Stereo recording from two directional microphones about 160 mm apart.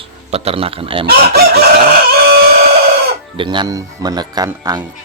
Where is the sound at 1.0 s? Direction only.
75° right (ahead or behind).